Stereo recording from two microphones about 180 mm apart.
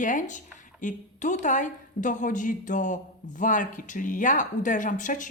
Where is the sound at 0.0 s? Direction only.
45° left (ahead or behind).